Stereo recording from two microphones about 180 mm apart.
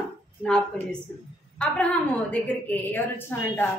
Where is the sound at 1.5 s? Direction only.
5° left (ahead or behind).